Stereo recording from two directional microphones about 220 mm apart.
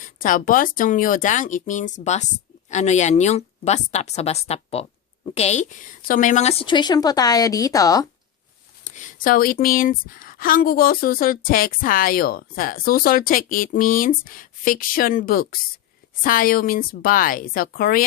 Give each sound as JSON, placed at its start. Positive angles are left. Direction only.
{"t": 0.0, "sound": "a woman's voice", "side_deg": 35}
{"t": 8.8, "sound": "speech", "side_deg": 35}